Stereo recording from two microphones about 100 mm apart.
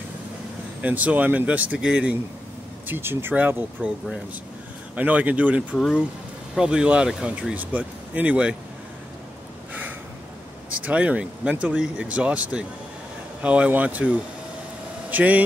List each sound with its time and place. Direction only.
0.8 s speech: 15° right (ahead or behind)
2.9 s speech: 20° right (ahead or behind)
10.7 s speech: 15° right (ahead or behind)